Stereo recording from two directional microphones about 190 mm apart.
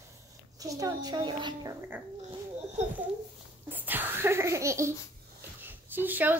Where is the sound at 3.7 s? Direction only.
10° right (ahead or behind).